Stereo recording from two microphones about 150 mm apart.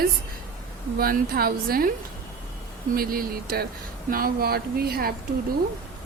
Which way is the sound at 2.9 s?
75° right (ahead or behind).